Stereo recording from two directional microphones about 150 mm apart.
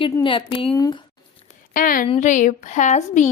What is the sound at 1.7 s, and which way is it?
Speech, 65° left (ahead or behind).